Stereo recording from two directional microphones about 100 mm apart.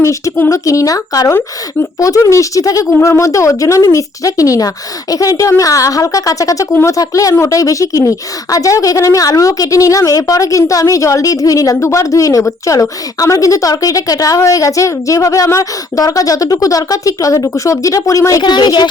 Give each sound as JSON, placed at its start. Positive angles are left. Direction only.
{"t": 0.0, "sound": "a woman's voice", "side_deg": 30}
{"t": 6.7, "sound": "speech", "side_deg": 20}
{"t": 6.9, "sound": "a woman's voice", "side_deg": 35}